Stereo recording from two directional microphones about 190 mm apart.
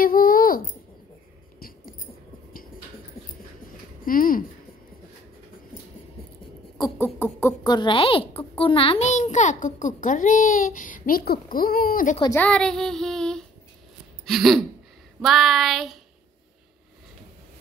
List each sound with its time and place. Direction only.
0.0 s a sound: 50° left (ahead or behind)
4.0 s speech: 50° left (ahead or behind)
6.8 s speech: 10° left (ahead or behind); by 12.2 s 50° left (ahead or behind)
12.4 s female singing: 5° left (ahead or behind)
14.2 s throat clearing: centre (ahead or behind)
15.2 s female singing: centre (ahead or behind)